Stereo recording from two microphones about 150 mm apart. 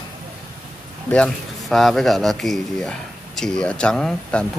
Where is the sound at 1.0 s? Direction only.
5° left (ahead or behind).